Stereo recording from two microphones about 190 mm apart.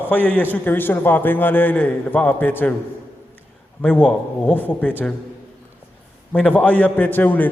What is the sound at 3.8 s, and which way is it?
A man's voice, 5° left (ahead or behind).